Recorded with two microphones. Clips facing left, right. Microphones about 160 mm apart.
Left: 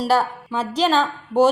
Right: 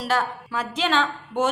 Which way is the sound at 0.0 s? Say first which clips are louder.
Left 5 dB; 35° left (ahead or behind).